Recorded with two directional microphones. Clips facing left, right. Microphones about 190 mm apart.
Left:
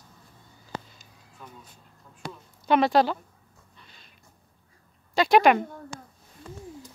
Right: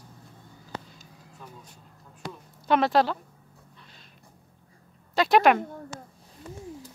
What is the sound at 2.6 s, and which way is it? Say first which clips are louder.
Speech: left 1 dB; centre (ahead or behind).